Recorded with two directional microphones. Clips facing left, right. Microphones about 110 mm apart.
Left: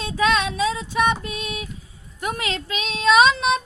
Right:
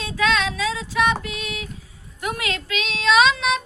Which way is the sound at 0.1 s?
25° left (ahead or behind).